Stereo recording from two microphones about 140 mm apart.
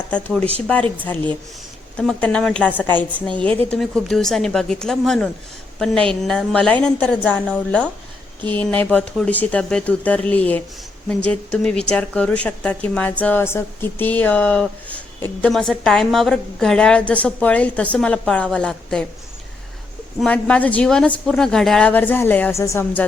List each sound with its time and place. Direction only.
0.7 s a woman's voice: 10° left (ahead or behind)
20.1 s a woman's voice: 5° left (ahead or behind)